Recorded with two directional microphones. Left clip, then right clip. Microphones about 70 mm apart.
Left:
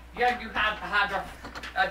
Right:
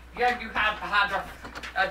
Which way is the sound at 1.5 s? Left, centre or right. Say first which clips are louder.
Even; centre.